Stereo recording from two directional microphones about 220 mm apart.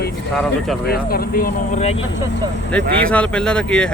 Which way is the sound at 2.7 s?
5° left (ahead or behind).